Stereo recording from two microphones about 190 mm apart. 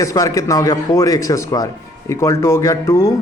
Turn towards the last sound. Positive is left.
turn(degrees=15)  # may be behind; listen again after turning